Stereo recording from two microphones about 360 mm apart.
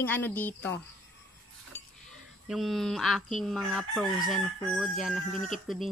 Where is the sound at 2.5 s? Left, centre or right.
Centre.